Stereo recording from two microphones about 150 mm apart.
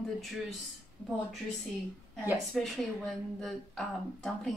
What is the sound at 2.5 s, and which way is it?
A woman's voice, centre (ahead or behind).